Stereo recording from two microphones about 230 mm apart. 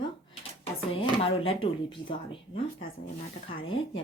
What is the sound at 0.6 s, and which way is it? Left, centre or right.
Speech, left.